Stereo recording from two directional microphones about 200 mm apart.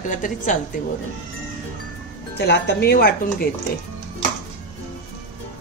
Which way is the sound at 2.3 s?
55° left (ahead or behind).